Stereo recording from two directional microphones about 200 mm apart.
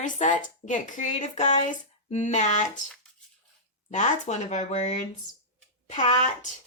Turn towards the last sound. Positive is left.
turn(degrees=35)  # may be behind; listen again after turning